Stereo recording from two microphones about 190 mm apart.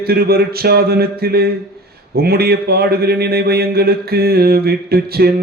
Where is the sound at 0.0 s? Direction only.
55° right (ahead or behind).